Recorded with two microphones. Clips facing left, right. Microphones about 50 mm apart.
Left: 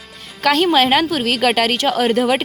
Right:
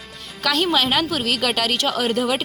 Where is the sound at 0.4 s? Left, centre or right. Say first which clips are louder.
Left 6 dB; left.